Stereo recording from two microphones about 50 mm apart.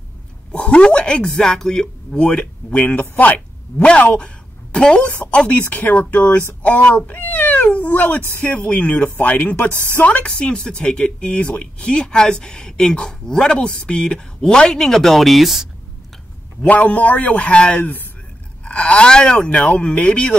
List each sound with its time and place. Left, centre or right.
0.6 s speech: left
1.3 s speech: centre
2.2 s speech: left
5.7 s speech: left
7.1 s cat: left
8.4 s speech: left
9.7 s speech: right
9.9 s speech: left; by 15.7 s centre
16.6 s speech: left
17.7 s speech: left
18.6 s speech: left